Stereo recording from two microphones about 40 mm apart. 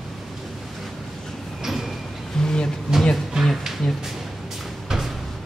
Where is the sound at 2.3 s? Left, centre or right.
Centre.